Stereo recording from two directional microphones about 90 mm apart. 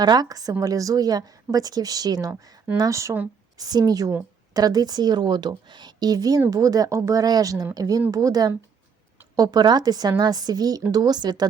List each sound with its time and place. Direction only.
0.0 s speech: 50° right (ahead or behind)
3.6 s speech: 45° right (ahead or behind)